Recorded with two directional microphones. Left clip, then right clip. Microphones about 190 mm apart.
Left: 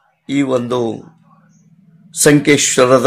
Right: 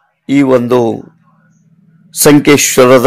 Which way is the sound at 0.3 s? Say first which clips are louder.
Right 7 dB; 40° right (ahead or behind).